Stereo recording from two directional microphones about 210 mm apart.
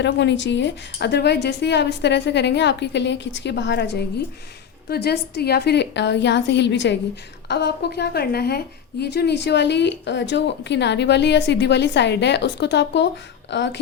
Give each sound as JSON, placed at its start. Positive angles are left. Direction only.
{"t": 0.0, "sound": "a woman's voice", "side_deg": 55}